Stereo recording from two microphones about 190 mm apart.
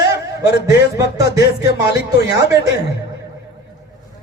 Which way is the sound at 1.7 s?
60° left (ahead or behind).